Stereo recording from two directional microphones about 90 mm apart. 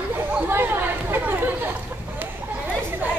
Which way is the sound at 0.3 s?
25° right (ahead or behind).